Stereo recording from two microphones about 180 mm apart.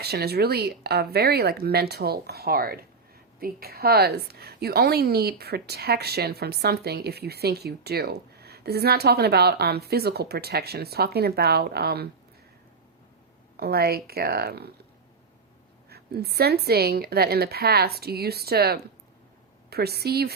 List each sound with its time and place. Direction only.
0.0 s a woman's voice: 60° right (ahead or behind)
13.6 s a woman's voice: 60° right (ahead or behind)
15.9 s a woman's voice: 60° right (ahead or behind)